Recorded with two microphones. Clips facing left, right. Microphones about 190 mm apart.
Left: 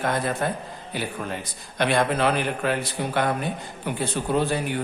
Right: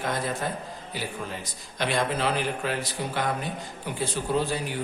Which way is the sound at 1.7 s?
60° left (ahead or behind).